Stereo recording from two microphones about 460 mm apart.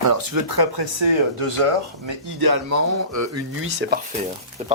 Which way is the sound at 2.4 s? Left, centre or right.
Right.